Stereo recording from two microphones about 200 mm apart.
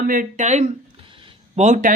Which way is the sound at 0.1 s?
40° right (ahead or behind).